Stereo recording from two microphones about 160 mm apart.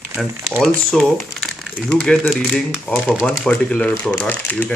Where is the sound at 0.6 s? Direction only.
Centre (ahead or behind).